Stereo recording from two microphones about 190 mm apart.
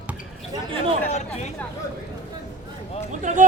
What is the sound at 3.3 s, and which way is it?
Speech, 40° right (ahead or behind).